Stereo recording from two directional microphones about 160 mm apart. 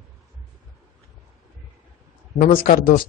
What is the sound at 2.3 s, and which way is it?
Speech, 65° left (ahead or behind).